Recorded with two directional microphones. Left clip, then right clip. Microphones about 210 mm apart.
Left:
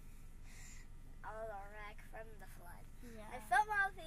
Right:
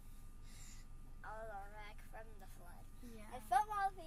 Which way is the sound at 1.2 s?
Centre (ahead or behind).